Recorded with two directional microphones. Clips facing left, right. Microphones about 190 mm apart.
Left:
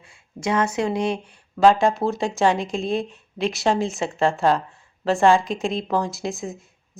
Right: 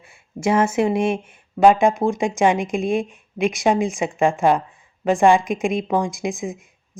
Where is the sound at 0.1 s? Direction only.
25° right (ahead or behind).